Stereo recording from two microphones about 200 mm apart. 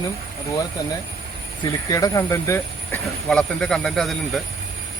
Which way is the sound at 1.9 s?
15° left (ahead or behind).